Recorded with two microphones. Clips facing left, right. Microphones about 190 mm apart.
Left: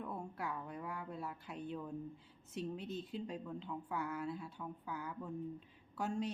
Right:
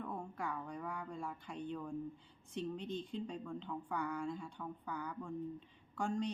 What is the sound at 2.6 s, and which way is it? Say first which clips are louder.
A woman's voice: right 1 dB; 5° left (ahead or behind).